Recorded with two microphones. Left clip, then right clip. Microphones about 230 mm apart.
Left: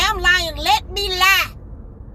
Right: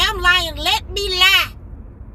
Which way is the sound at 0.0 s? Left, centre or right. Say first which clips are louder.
Right 1 dB; centre.